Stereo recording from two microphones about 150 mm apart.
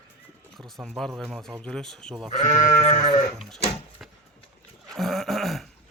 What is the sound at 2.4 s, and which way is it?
Sheep, 55° left (ahead or behind).